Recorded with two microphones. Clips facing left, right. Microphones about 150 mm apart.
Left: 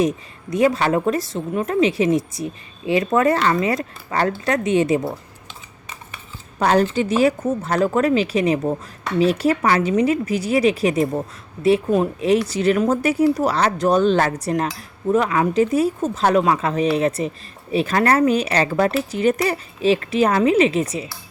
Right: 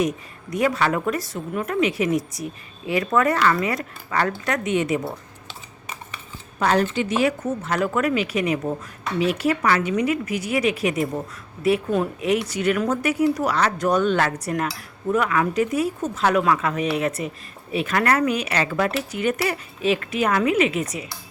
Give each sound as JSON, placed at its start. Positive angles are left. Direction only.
{"t": 0.5, "sound": "speech", "side_deg": 25}
{"t": 6.6, "sound": "speech", "side_deg": 35}